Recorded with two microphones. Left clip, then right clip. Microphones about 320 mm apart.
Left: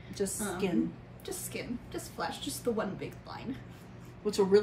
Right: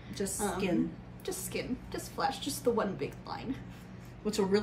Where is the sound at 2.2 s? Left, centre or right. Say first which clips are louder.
Right 4 dB; centre.